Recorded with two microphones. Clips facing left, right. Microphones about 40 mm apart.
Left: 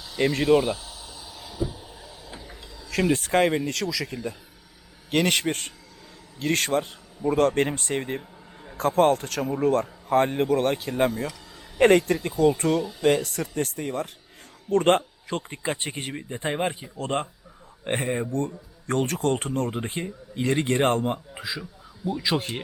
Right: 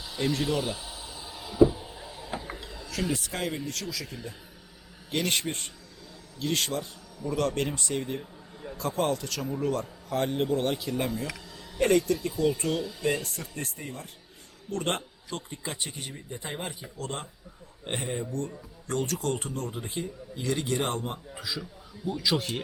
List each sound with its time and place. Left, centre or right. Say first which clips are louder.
0.2 s speech: left 5 dB; left
0.4 s speech: left 9 dB; left
0.9 s a sound: right 1 dB; right
1.6 s a sound: right 11 dB; centre
2.9 s speech: left 9 dB; left
4.0 s speech: left 8 dB; left
5.1 s a man's voice: left 6 dB; left
6.4 s a man's voice: left 6 dB; left
13.0 s speech: left 9 dB; left
13.4 s speech: left 9 dB; left
14.7 s speech: left 11 dB; left
21.0 s speech: left 8 dB; left
21.6 s a sound: left 3 dB; centre
22.2 s speech: left 1 dB; left